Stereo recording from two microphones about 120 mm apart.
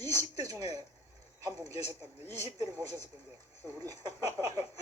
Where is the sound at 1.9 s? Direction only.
30° right (ahead or behind).